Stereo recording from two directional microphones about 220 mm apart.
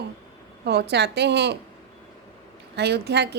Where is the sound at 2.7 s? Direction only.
50° right (ahead or behind).